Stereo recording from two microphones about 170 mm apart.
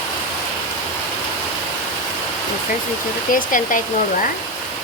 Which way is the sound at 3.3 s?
50° left (ahead or behind).